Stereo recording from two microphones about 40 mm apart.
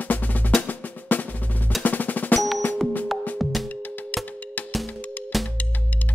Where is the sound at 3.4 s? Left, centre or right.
Centre.